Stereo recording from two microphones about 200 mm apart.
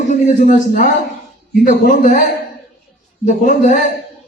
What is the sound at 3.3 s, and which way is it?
Speech, 40° left (ahead or behind).